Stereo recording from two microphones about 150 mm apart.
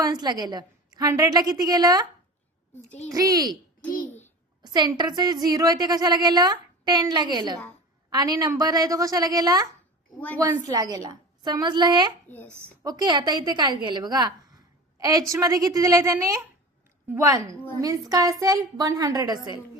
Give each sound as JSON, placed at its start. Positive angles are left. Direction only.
{"t": 0.0, "sound": "a woman's voice", "side_deg": -25}
{"t": 3.1, "sound": "a woman's voice", "side_deg": -25}
{"t": 3.9, "sound": "a child's voice", "side_deg": 70}
{"t": 4.6, "sound": "a woman's voice", "side_deg": -30}
{"t": 10.2, "sound": "a woman's voice", "side_deg": 10}
{"t": 10.5, "sound": "a woman's voice", "side_deg": -25}